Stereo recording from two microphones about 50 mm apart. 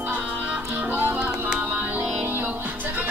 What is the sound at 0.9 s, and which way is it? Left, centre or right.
Music, right.